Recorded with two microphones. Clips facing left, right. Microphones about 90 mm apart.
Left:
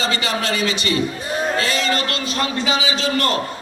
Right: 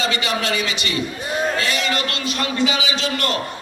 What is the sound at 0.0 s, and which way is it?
A man's voice, 35° left (ahead or behind).